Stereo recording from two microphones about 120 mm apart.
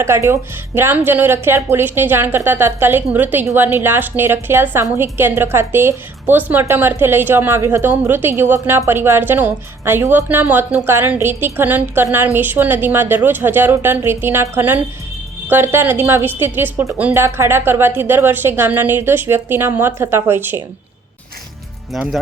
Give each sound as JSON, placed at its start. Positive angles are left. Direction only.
{"t": 0.0, "sound": "a woman's voice", "side_deg": -20}
{"t": 21.9, "sound": "speech", "side_deg": 0}